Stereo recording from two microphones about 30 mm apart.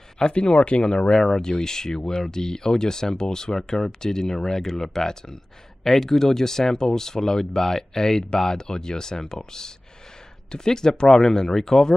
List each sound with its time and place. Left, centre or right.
0.2 s speech: left
1.1 s speech: centre